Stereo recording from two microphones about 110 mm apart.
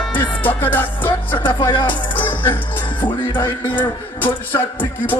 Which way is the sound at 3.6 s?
15° left (ahead or behind).